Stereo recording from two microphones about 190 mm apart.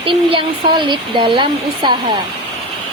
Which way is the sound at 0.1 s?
25° right (ahead or behind).